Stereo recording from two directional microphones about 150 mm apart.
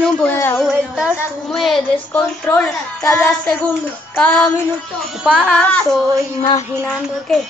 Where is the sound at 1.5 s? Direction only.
Centre (ahead or behind).